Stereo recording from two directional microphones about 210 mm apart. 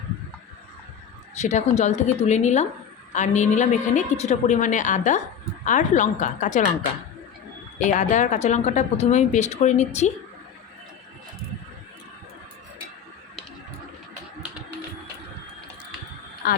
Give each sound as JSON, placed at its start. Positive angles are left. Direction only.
{"t": 1.4, "sound": "a woman's voice", "side_deg": 35}
{"t": 7.8, "sound": "a woman's voice", "side_deg": 35}